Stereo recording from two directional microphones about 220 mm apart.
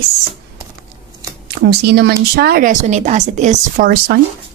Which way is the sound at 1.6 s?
50° right (ahead or behind).